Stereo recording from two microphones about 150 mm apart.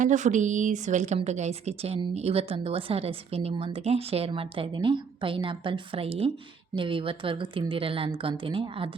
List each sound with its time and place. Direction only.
0.0 s a woman's voice: 55° right (ahead or behind); by 8.9 s 35° right (ahead or behind)